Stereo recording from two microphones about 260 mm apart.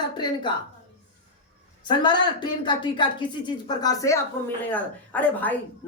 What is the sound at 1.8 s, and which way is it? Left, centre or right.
A woman's voice, centre.